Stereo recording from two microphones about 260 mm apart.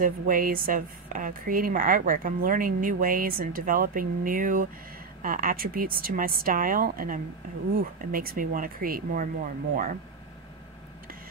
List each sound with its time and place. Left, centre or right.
0.0 s a woman's voice: right